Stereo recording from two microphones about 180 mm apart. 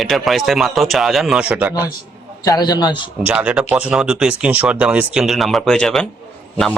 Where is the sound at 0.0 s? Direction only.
Centre (ahead or behind).